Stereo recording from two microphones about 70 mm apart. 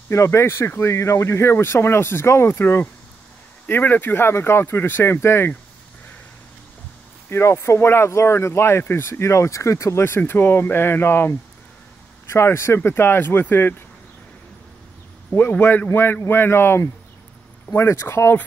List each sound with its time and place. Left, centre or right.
0.1 s speech: left
7.2 s speech: left
15.5 s speech: left